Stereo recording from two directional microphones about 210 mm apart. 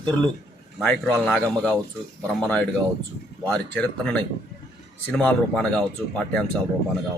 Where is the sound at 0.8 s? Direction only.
5° left (ahead or behind).